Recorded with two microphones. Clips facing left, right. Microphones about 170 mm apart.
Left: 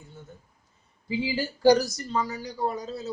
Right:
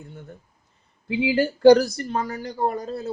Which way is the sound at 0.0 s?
65° right (ahead or behind).